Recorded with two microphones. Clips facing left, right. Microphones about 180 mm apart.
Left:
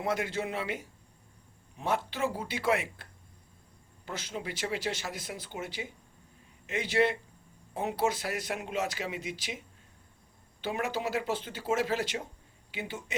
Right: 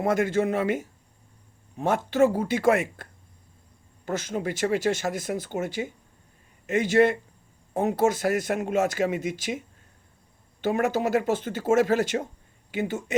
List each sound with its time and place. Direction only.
0.0 s speech: 50° right (ahead or behind)
10.6 s speech: 45° right (ahead or behind)